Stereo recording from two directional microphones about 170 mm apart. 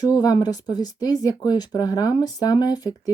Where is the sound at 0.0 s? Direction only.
25° left (ahead or behind).